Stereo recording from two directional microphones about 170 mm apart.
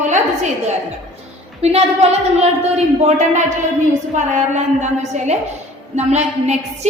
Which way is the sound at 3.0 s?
40° right (ahead or behind).